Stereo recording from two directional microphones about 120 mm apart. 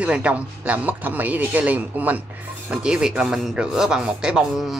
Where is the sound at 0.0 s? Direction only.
10° right (ahead or behind).